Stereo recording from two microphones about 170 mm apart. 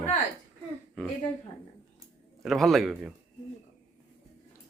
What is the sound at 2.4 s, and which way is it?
Speech, centre (ahead or behind).